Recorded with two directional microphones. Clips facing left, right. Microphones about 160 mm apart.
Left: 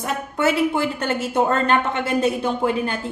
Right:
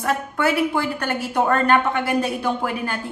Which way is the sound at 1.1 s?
25° left (ahead or behind).